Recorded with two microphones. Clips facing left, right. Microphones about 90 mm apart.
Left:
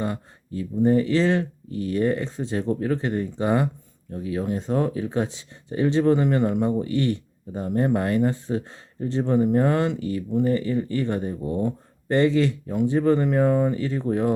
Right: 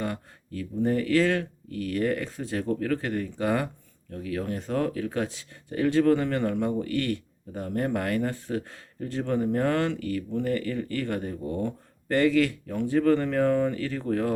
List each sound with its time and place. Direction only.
0.0 s speech: 20° left (ahead or behind)